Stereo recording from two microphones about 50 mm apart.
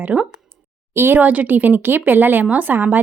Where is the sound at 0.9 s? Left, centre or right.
Right.